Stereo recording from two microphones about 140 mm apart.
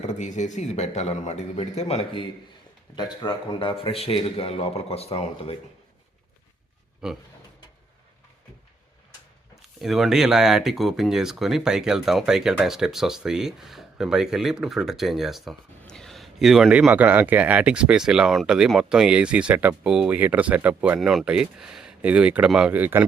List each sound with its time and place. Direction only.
0.0 s a man's voice: 60° left (ahead or behind)
2.9 s a man's voice: 30° left (ahead or behind); by 5.5 s 45° left (ahead or behind)
7.0 s speech: 5° right (ahead or behind)
9.6 s speech: centre (ahead or behind)